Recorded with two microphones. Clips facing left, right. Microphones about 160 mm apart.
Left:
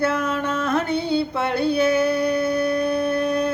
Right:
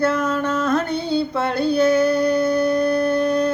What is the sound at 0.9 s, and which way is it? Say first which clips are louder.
Female singing: even; 60° left (ahead or behind).